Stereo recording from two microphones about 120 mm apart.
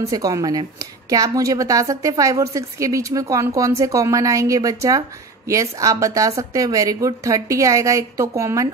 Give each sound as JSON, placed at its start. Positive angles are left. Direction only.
{"t": 0.0, "sound": "speech", "side_deg": -30}